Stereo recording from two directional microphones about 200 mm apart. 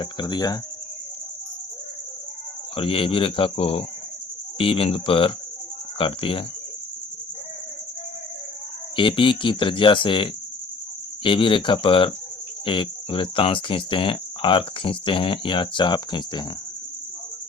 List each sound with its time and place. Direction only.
0.0 s speech: 20° left (ahead or behind)
2.7 s speech: 25° left (ahead or behind)
9.0 s speech: 25° left (ahead or behind)